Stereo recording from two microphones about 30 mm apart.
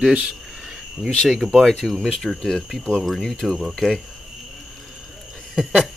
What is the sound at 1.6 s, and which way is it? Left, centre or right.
Speech, centre.